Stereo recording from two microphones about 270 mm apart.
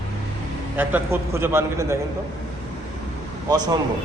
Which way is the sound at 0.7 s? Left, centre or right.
Centre.